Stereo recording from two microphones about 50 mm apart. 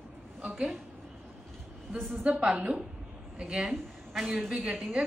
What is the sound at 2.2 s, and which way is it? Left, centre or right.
A woman's voice, right.